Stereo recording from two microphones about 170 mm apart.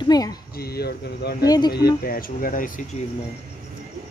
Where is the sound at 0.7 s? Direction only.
70° left (ahead or behind).